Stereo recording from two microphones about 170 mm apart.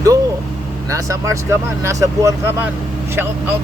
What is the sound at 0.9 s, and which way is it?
Speech, 20° right (ahead or behind).